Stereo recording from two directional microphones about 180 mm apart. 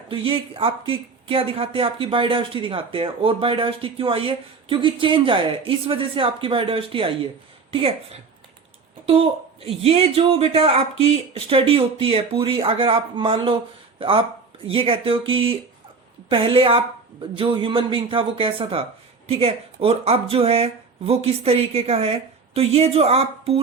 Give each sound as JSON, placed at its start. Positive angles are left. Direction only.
{"t": 0.1, "sound": "speech", "side_deg": -30}